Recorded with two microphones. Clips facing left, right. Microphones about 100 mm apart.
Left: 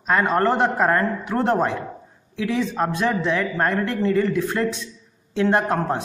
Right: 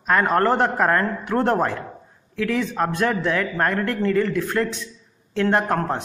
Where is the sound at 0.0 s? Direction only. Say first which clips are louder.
Even; centre (ahead or behind).